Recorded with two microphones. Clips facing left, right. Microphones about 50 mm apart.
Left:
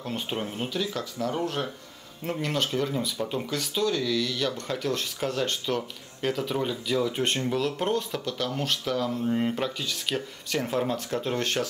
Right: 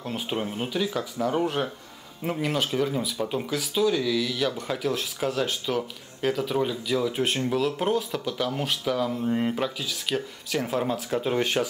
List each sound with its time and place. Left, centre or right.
0.0 s speech: centre